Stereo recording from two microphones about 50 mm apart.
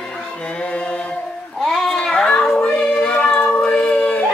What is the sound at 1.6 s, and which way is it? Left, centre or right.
Child singing, centre.